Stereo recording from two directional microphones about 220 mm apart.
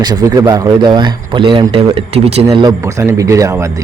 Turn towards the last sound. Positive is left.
turn(degrees=-15)  # may be behind; listen again after turning